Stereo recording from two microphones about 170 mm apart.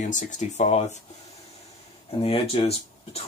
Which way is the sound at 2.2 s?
35° left (ahead or behind).